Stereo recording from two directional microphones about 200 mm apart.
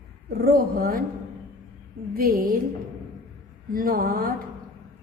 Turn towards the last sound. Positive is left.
turn(degrees=-45)  # may be behind; listen again after turning